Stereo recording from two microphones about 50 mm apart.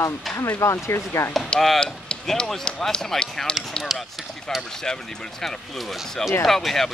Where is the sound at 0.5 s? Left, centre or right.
Left.